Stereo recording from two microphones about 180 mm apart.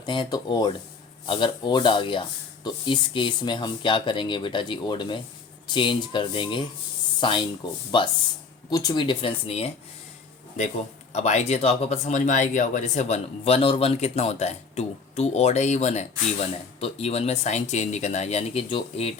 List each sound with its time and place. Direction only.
0.0 s speech: 25° left (ahead or behind)
11.1 s speech: 40° left (ahead or behind)